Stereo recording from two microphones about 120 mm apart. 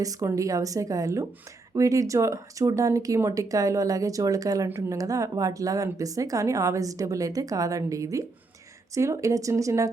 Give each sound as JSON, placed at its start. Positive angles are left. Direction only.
{"t": 0.0, "sound": "speech", "side_deg": -25}